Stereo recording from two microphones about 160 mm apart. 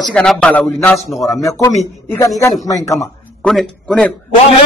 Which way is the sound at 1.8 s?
20° left (ahead or behind).